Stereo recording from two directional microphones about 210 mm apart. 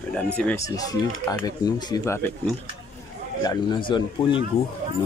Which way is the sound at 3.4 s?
20° left (ahead or behind).